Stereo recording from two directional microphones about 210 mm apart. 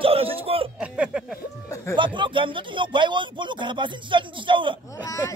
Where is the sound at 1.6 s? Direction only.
15° left (ahead or behind).